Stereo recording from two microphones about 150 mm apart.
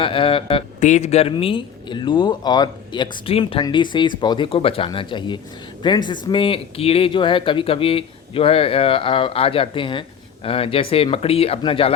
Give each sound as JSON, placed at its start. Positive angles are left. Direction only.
{"t": 0.0, "sound": "speech", "side_deg": 35}
{"t": 0.8, "sound": "speech", "side_deg": 50}